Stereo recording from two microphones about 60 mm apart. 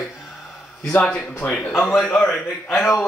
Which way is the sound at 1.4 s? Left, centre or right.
Centre.